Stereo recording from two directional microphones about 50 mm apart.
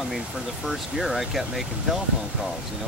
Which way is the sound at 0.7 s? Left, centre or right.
Centre.